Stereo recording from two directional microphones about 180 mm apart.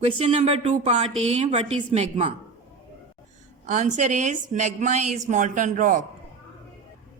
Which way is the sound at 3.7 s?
45° right (ahead or behind).